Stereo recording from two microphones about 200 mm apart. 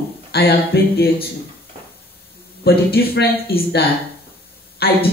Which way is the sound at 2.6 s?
50° left (ahead or behind).